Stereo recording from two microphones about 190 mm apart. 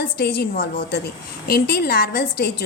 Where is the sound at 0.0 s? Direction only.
55° left (ahead or behind).